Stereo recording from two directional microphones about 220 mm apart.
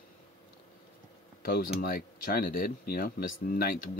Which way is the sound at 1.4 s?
40° left (ahead or behind).